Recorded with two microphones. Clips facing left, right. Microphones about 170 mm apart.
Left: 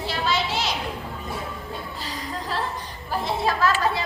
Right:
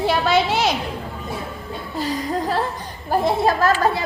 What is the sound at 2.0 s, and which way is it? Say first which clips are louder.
A woman's voice: right 15 dB; 50° right (ahead or behind).